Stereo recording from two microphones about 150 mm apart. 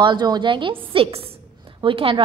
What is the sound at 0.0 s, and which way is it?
A woman's voice, 30° right (ahead or behind).